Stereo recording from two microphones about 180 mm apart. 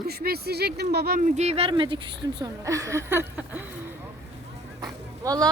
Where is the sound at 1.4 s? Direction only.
35° right (ahead or behind); by 3.7 s 10° right (ahead or behind).